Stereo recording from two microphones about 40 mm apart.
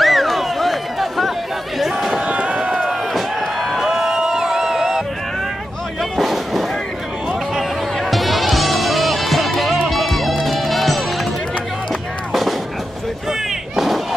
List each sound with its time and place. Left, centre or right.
0.0 s a sound: centre
2.2 s run: right
2.5 s run: centre
2.9 s a sound: centre
6.1 s artillery fire: centre
8.0 s music: centre
12.3 s fireworks: centre
13.7 s thump: centre